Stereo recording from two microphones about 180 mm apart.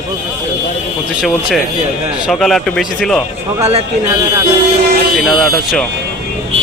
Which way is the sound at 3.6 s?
35° right (ahead or behind).